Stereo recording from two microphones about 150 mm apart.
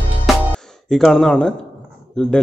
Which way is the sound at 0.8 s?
Centre (ahead or behind).